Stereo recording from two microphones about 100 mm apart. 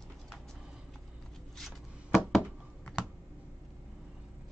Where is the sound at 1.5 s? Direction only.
Centre (ahead or behind).